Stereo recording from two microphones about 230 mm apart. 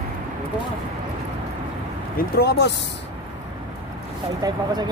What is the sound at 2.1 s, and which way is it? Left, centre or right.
Speech, left.